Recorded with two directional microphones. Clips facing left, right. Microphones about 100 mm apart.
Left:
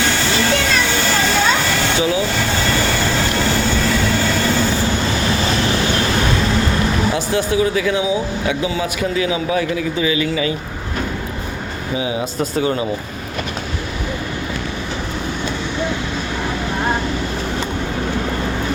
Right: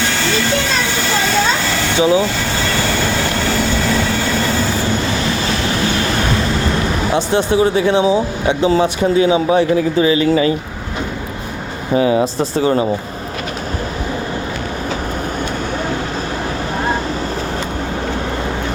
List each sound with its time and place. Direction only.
2.0 s speech: 25° right (ahead or behind)
7.1 s speech: 25° right (ahead or behind); by 10.5 s 40° right (ahead or behind)
11.9 s speech: 50° right (ahead or behind)
12.2 s speech: 30° right (ahead or behind)